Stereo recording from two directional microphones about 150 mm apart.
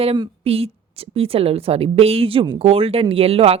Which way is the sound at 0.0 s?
40° right (ahead or behind).